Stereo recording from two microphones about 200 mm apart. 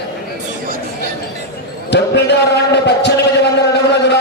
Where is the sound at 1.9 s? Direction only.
60° left (ahead or behind).